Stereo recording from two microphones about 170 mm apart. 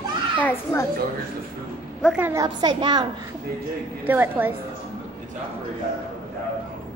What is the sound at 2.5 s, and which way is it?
Speech, 25° right (ahead or behind).